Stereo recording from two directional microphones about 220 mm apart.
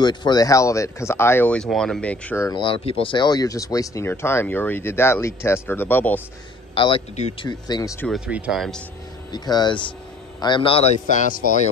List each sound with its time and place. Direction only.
0.0 s speech: 20° left (ahead or behind)
6.7 s speech: 25° left (ahead or behind)
7.6 s speech: 15° left (ahead or behind)
8.1 s speech: 5° right (ahead or behind)
9.3 s speech: 20° left (ahead or behind); by 11.7 s 35° left (ahead or behind)